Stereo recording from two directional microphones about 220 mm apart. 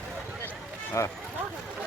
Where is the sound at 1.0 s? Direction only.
15° left (ahead or behind).